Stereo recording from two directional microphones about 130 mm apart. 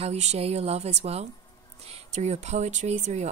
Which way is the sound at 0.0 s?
55° right (ahead or behind).